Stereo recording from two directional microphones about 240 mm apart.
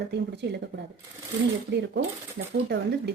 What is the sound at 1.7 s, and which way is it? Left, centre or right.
Speech, right.